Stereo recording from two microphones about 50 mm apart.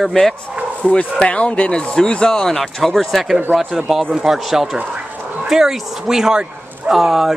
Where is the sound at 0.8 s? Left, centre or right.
Centre.